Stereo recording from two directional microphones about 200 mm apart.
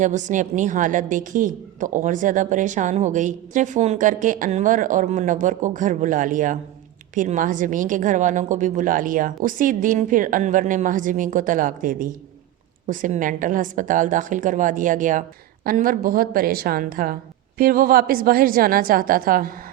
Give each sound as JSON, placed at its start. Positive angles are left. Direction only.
{"t": 0.0, "sound": "a woman's voice", "side_deg": -40}